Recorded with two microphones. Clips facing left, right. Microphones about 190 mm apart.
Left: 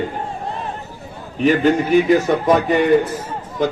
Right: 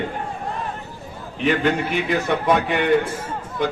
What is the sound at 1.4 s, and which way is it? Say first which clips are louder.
A man's voice: left 5 dB; 40° left (ahead or behind).